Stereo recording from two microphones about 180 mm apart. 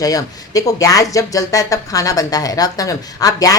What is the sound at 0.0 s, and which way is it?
Speech, 20° left (ahead or behind).